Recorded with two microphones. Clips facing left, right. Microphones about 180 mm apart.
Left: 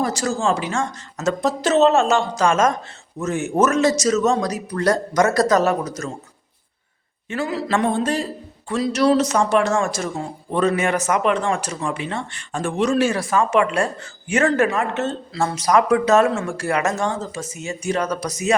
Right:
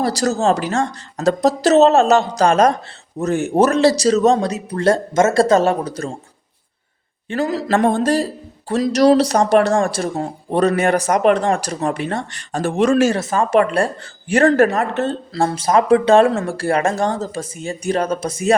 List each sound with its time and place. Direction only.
0.0 s speech: 35° right (ahead or behind)
7.3 s speech: 40° right (ahead or behind)
13.3 s speech: 35° right (ahead or behind)